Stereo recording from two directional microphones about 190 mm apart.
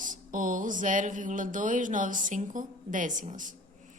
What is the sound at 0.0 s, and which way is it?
A woman's voice, 45° right (ahead or behind).